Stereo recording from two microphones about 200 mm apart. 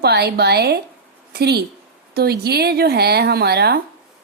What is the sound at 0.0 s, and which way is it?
A woman's voice, 55° right (ahead or behind).